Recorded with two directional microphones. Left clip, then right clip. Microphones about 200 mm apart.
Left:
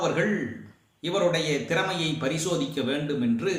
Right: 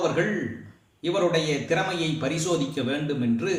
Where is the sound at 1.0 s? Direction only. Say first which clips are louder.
Right 1 dB; 10° left (ahead or behind).